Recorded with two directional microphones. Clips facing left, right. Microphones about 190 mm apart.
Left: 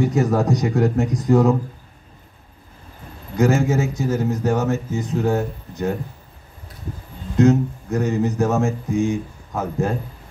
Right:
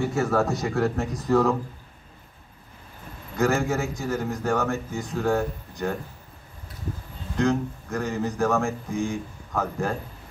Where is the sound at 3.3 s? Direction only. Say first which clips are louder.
Left 5 dB; 20° left (ahead or behind).